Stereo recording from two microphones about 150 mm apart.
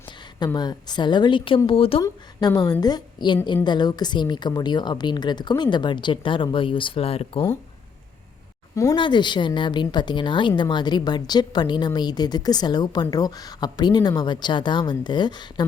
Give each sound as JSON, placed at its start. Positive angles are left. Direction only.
{"t": 0.3, "sound": "a woman's voice", "side_deg": 30}
{"t": 2.0, "sound": "a woman's voice", "side_deg": 20}
{"t": 8.7, "sound": "speech", "side_deg": 20}
{"t": 9.0, "sound": "a woman's voice", "side_deg": 30}